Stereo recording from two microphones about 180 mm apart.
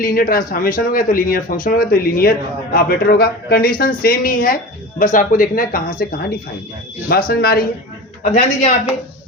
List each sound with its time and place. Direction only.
0.0 s speech: 55° left (ahead or behind)
8.2 s speech: 45° left (ahead or behind)